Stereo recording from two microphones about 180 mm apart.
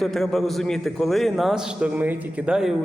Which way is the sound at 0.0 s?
Centre (ahead or behind).